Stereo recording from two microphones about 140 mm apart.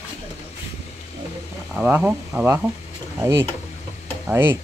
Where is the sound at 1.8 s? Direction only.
15° right (ahead or behind).